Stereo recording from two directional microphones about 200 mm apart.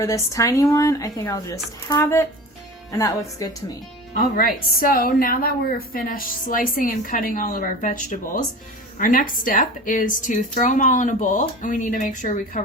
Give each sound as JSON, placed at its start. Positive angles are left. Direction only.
{"t": 0.0, "sound": "speech", "side_deg": 15}
{"t": 4.1, "sound": "a woman's voice", "side_deg": 45}